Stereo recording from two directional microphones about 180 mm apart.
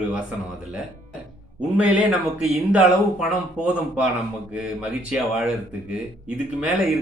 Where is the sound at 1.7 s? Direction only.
10° right (ahead or behind).